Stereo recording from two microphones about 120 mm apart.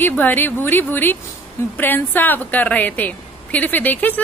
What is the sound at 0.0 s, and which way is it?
A woman's voice, 15° left (ahead or behind).